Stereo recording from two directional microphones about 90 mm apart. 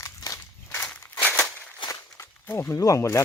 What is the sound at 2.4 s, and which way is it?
Speech, 25° left (ahead or behind).